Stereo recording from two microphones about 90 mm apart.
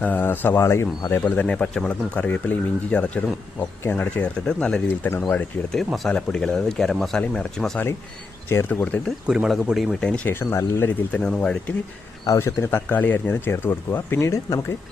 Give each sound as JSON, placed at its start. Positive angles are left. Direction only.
{"t": 0.0, "sound": "speech", "side_deg": 20}
{"t": 1.2, "sound": "speech", "side_deg": 15}
{"t": 4.4, "sound": "speech", "side_deg": 10}
{"t": 5.0, "sound": "speech", "side_deg": 20}
{"t": 5.7, "sound": "speech", "side_deg": 5}
{"t": 8.4, "sound": "speech", "side_deg": 25}
{"t": 8.8, "sound": "speech", "side_deg": 15}
{"t": 9.2, "sound": "speech", "side_deg": -10}
{"t": 10.2, "sound": "speech", "side_deg": 30}
{"t": 11.1, "sound": "speech", "side_deg": 10}
{"t": 12.2, "sound": "a man's voice", "side_deg": 35}
{"t": 12.9, "sound": "speech", "side_deg": 20}